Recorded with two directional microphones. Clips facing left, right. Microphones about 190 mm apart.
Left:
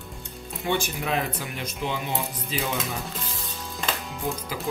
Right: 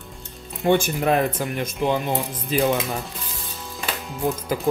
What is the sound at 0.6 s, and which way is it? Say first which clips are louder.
Speech: right 8 dB; 50° right (ahead or behind).